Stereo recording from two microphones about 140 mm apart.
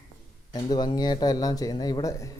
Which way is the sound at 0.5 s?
30° left (ahead or behind).